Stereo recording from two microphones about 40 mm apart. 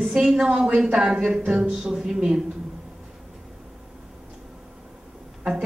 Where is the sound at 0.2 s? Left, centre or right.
Centre.